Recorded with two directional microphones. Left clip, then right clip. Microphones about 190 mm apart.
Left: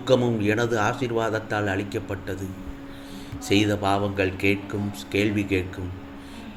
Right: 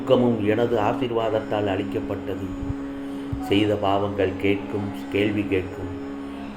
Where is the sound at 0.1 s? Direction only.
50° left (ahead or behind).